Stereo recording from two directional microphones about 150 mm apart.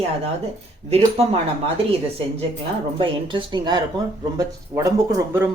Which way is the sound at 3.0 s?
30° right (ahead or behind).